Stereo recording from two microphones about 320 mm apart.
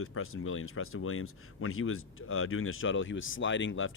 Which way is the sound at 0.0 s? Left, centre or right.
Left.